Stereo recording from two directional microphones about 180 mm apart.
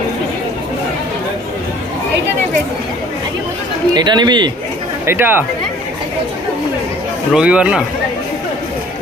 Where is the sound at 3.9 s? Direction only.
25° right (ahead or behind).